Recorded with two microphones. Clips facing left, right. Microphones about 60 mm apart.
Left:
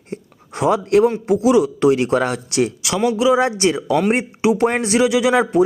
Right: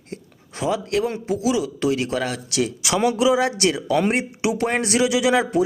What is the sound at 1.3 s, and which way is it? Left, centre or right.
A man's voice, left.